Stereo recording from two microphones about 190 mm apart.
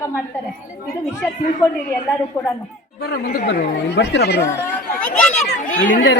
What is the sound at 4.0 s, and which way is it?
Speech, 65° left (ahead or behind).